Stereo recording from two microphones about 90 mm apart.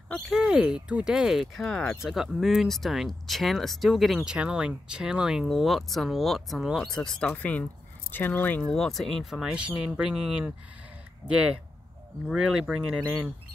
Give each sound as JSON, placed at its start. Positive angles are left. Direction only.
{"t": 0.3, "sound": "speech", "side_deg": -5}
{"t": 8.6, "sound": "speech", "side_deg": 5}